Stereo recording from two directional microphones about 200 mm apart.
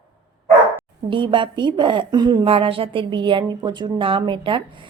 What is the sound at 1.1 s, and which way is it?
Speech, 25° right (ahead or behind).